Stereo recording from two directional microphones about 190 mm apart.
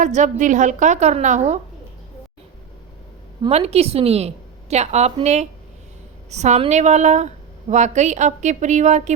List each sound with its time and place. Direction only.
0.0 s a woman's voice: 40° right (ahead or behind)
3.5 s a woman's voice: 30° right (ahead or behind)